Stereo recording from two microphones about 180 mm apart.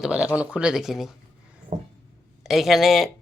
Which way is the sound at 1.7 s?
45° right (ahead or behind).